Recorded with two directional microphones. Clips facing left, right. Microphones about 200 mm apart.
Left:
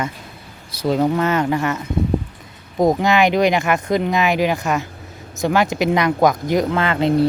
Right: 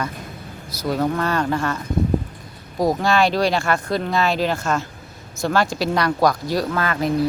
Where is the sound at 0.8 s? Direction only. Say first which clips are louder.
Left 4 dB; 20° left (ahead or behind).